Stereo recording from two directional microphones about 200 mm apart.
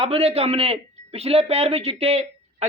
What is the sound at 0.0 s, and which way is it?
A man's voice, 30° right (ahead or behind).